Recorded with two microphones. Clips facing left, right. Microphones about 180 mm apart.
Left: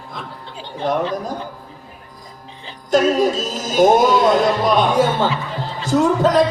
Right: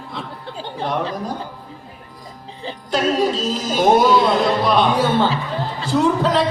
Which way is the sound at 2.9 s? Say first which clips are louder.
Left 3 dB; 45° left (ahead or behind).